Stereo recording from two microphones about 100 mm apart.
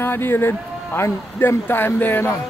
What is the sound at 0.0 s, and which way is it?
Speech, 20° left (ahead or behind).